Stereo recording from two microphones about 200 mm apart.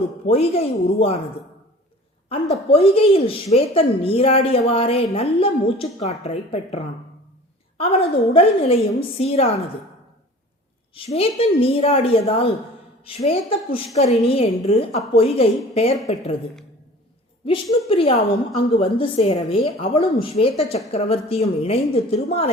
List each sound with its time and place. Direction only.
0.3 s a woman's voice: 30° left (ahead or behind)
2.6 s a woman's voice: 30° left (ahead or behind)
10.9 s a woman's voice: 30° left (ahead or behind)
17.4 s a woman's voice: 30° left (ahead or behind)